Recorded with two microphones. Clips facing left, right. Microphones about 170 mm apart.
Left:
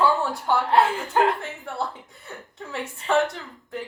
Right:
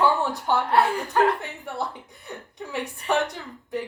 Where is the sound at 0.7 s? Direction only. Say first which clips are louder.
Left 2 dB; 25° left (ahead or behind).